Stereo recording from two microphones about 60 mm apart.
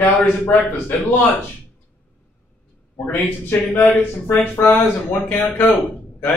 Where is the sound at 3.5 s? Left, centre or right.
Left.